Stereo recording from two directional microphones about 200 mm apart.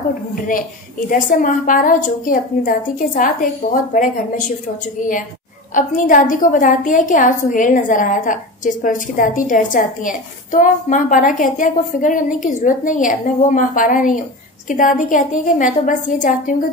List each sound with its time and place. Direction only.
1.1 s a woman's voice: 40° left (ahead or behind)
5.8 s a woman's voice: 40° left (ahead or behind)